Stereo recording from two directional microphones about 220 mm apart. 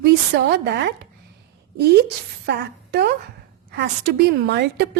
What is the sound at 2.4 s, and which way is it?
A woman's voice, 45° right (ahead or behind).